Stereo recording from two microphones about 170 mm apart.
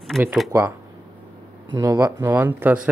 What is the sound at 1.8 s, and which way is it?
Speech, 20° right (ahead or behind).